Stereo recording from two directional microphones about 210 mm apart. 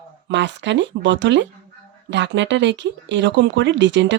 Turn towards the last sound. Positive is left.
turn(degrees=-60)  # may be behind; listen again after turning